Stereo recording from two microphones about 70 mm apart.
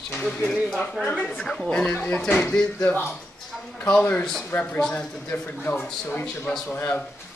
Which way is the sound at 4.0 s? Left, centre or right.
Left.